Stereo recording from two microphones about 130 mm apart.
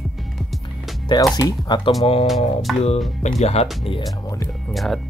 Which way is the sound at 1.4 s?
30° left (ahead or behind).